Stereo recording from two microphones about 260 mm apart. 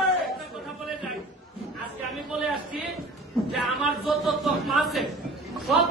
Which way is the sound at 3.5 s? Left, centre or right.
Centre.